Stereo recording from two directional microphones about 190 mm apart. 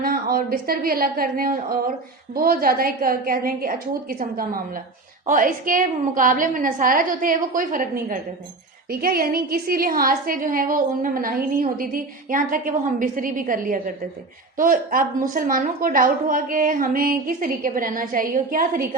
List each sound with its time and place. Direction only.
0.0 s a woman's voice: 50° right (ahead or behind)
8.9 s a woman's voice: 50° right (ahead or behind)